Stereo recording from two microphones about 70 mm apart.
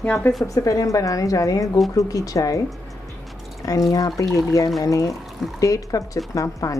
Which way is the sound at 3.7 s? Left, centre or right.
Left.